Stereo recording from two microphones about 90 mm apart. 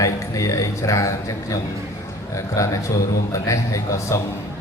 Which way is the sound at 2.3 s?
35° left (ahead or behind).